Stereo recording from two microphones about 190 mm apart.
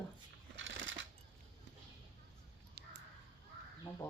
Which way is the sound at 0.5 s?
90° right.